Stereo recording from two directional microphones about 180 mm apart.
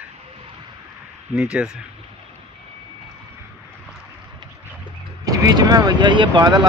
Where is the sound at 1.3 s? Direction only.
5° right (ahead or behind).